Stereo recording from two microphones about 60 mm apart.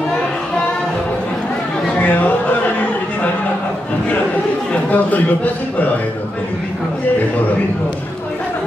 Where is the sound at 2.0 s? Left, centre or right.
Left.